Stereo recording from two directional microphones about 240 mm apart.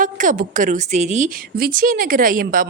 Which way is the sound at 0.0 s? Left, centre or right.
Right.